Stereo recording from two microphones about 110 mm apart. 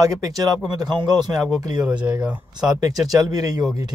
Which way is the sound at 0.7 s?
40° right (ahead or behind).